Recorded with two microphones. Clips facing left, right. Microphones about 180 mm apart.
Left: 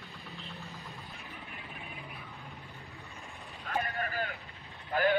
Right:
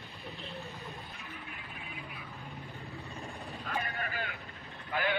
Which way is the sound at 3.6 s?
40° left (ahead or behind).